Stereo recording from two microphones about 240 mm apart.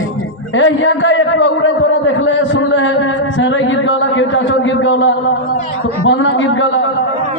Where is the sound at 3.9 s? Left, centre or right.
Left.